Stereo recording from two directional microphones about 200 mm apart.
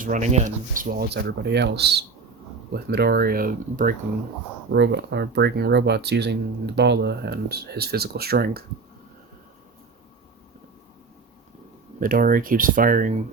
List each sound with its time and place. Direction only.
0.0 s speech: 40° right (ahead or behind)
4.7 s speech: 60° right (ahead or behind)
11.9 s speech: 45° right (ahead or behind)